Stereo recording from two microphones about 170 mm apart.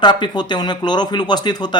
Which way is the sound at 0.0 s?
25° left (ahead or behind).